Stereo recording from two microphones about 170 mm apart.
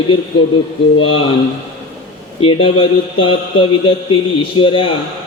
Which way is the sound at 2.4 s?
30° left (ahead or behind).